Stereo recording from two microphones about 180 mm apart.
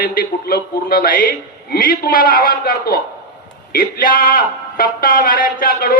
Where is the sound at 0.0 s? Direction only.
50° left (ahead or behind).